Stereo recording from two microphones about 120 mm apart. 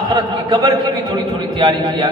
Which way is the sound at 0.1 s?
35° right (ahead or behind).